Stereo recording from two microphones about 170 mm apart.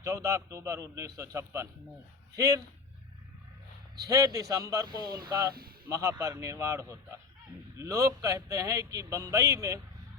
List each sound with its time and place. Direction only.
0.0 s a man's voice: 20° right (ahead or behind)
4.1 s a man's voice: 20° right (ahead or behind)
4.9 s speech: 60° right (ahead or behind)
5.8 s a man's voice: 20° right (ahead or behind)